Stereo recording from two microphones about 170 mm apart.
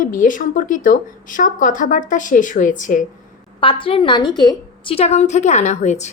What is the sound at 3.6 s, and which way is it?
A woman's voice, 30° left (ahead or behind).